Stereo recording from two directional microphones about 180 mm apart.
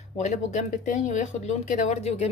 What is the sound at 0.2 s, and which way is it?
Speech, 40° left (ahead or behind).